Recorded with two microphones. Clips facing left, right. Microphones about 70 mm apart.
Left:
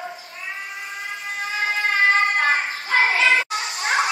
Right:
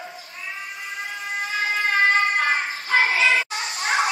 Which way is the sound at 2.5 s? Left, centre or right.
Centre.